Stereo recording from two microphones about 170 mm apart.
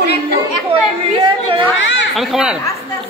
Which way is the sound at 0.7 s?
35° right (ahead or behind).